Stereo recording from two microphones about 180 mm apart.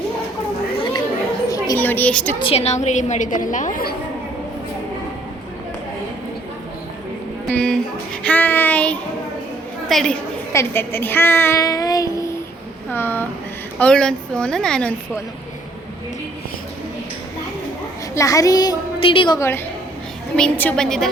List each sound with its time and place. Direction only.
1.5 s a woman's voice: 20° left (ahead or behind)
2.4 s a woman's voice: 35° left (ahead or behind)
7.5 s speech: 5° left (ahead or behind)
8.2 s child singing: 10° left (ahead or behind)
9.9 s speech: 5° left (ahead or behind)
10.5 s child singing: 15° left (ahead or behind)
12.9 s a sound: 10° left (ahead or behind)
13.7 s speech: 5° left (ahead or behind)
18.1 s a woman's voice: 20° left (ahead or behind)
19.4 s child singing: 15° left (ahead or behind)
20.3 s speech: 5° left (ahead or behind)